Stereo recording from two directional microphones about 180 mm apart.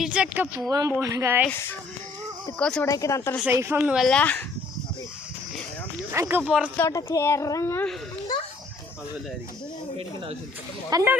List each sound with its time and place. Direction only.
0.0 s speech: 5° right (ahead or behind)
0.7 s speech: 15° right (ahead or behind)
2.6 s speech: 5° left (ahead or behind)
2.8 s a woman's voice: 15° left (ahead or behind)
3.4 s speech: 15° right (ahead or behind)
3.8 s speech: 5° right (ahead or behind)
6.1 s speech: 10° right (ahead or behind)
6.7 s a woman's voice: 15° left (ahead or behind)
10.8 s speech: 15° right (ahead or behind)